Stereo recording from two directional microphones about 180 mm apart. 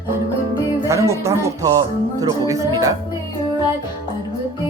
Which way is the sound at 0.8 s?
15° right (ahead or behind).